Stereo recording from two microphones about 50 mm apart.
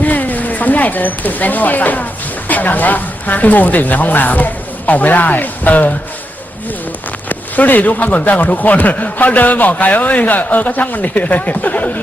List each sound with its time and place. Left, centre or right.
0.0 s a sound: left
2.5 s a man's voice: left
7.3 s a man's voice: left